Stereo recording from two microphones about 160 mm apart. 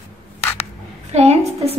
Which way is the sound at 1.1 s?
40° right (ahead or behind).